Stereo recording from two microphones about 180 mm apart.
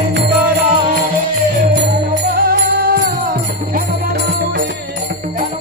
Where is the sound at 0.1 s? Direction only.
75° right (ahead or behind).